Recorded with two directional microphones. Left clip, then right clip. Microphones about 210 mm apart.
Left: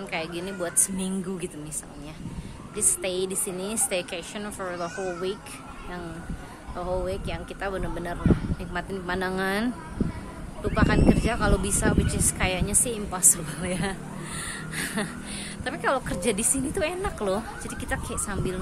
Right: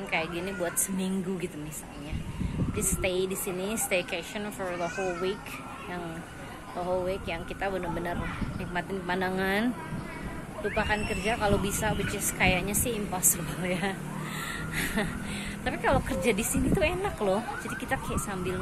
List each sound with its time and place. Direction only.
0.1 s a woman's voice: 10° left (ahead or behind)
2.7 s a woman's voice: 10° left (ahead or behind)
6.9 s a woman's voice: 15° left (ahead or behind)
10.8 s a woman's voice: 20° left (ahead or behind)
15.0 s a woman's voice: 10° left (ahead or behind)